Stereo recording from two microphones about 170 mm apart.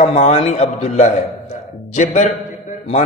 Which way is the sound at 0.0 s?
40° left (ahead or behind).